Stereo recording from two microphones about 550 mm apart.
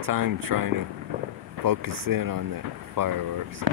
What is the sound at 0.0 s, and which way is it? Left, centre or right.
Speech, right.